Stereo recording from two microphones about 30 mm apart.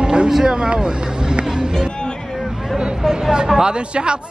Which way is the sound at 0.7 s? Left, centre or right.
Right.